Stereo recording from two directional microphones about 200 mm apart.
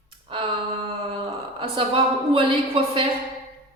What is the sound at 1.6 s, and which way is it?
A woman's voice, 25° right (ahead or behind).